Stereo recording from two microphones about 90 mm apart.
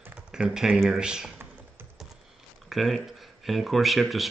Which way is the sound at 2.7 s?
Centre (ahead or behind).